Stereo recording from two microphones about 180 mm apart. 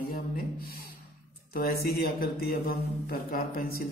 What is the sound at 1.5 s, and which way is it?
Speech, 55° left (ahead or behind).